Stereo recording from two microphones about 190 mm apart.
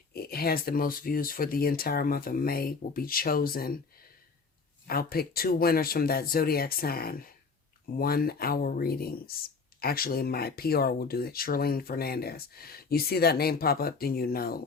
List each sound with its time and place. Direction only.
0.1 s speech: 55° left (ahead or behind)
4.9 s speech: 50° left (ahead or behind)